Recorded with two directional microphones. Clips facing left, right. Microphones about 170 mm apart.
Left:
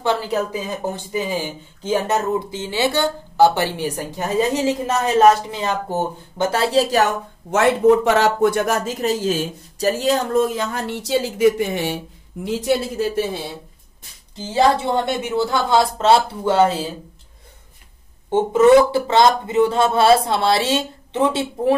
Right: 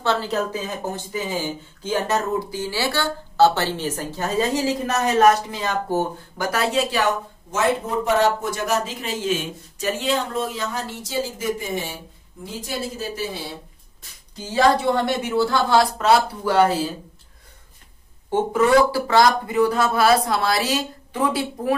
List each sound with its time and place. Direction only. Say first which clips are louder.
0.0 s speech: left 2 dB; 10° left (ahead or behind); by 7.1 s 40° left (ahead or behind)
7.5 s speech: left 8 dB; 80° left
14.5 s speech: left 1 dB; 20° left (ahead or behind)
18.3 s speech: left 5 dB; 20° left (ahead or behind)